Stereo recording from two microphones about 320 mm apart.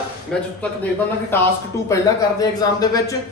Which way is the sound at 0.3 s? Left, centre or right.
Centre.